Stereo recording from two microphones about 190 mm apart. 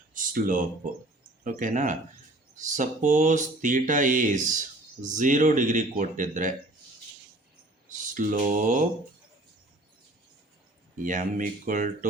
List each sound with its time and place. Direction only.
0.1 s a sound: 45° right (ahead or behind)
1.5 s speech: 45° right (ahead or behind)
7.9 s speech: 45° right (ahead or behind)
11.0 s speech: 45° right (ahead or behind)